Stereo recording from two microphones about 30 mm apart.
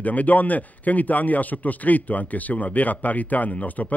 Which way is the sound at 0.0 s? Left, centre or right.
Left.